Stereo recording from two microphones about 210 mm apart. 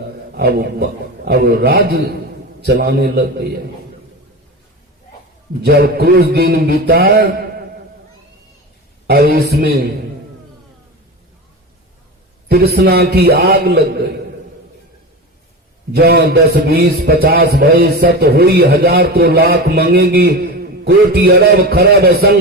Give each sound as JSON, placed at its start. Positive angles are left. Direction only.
{"t": 0.3, "sound": "a man's voice", "side_deg": -50}
{"t": 5.6, "sound": "a man's voice", "side_deg": -45}
{"t": 9.0, "sound": "a man's voice", "side_deg": -50}
{"t": 12.5, "sound": "a man's voice", "side_deg": -45}
{"t": 15.9, "sound": "a man's voice", "side_deg": -45}